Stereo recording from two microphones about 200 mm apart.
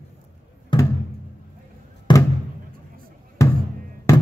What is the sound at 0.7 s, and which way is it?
Music, 20° left (ahead or behind).